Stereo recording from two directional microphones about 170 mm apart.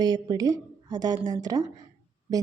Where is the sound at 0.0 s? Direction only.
25° right (ahead or behind).